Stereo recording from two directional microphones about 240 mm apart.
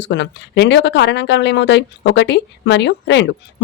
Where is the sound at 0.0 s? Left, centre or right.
Left.